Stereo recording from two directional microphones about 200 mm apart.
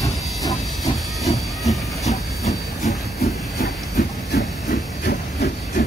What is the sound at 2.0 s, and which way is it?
Hiss, 35° left (ahead or behind).